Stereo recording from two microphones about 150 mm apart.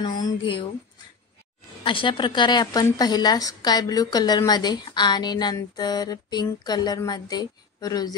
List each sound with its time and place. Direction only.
0.0 s a woman's voice: 25° left (ahead or behind)
1.8 s a woman's voice: 35° left (ahead or behind)